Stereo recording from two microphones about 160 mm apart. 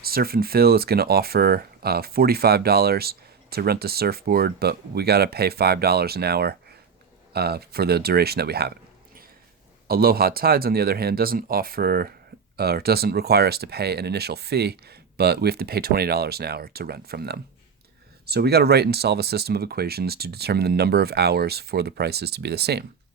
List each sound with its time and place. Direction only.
0.0 s speech: 70° right (ahead or behind); by 22.8 s 90° right